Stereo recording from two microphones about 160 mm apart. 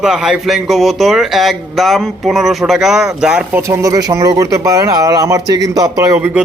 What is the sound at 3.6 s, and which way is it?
Speech, 20° right (ahead or behind).